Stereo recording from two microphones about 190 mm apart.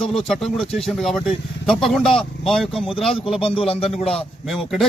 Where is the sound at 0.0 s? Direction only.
Centre (ahead or behind).